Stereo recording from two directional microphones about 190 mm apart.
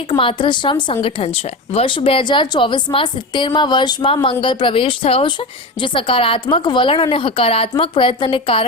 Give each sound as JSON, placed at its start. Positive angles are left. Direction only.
{"t": 0.1, "sound": "speech", "side_deg": 25}